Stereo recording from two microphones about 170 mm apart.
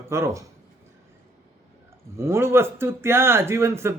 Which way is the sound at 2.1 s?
15° right (ahead or behind).